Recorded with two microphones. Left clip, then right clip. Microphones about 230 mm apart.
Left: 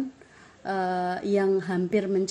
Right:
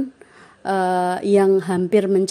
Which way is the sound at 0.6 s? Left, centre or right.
Right.